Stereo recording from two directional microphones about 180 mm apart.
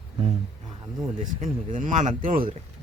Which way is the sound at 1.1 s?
45° right (ahead or behind).